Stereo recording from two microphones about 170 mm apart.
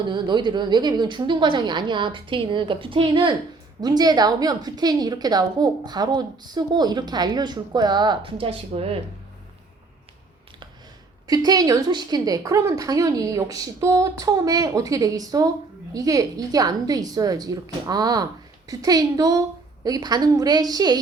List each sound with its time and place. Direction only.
0.0 s a woman's voice: 25° right (ahead or behind)
11.3 s a woman's voice: 20° right (ahead or behind)